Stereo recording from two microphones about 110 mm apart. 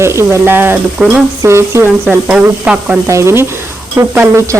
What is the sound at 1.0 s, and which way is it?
Stir, 10° right (ahead or behind).